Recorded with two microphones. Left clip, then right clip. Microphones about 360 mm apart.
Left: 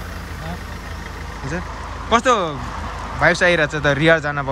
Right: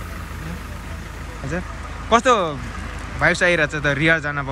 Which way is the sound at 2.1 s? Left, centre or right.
Centre.